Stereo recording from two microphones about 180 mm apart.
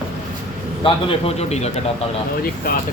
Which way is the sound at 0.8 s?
35° left (ahead or behind).